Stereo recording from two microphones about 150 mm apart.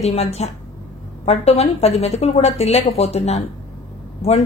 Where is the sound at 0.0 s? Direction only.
45° left (ahead or behind).